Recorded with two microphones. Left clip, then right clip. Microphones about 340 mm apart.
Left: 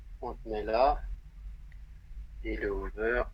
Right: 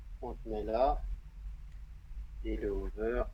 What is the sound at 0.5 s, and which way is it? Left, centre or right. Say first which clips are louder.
Speech: left 4 dB; left.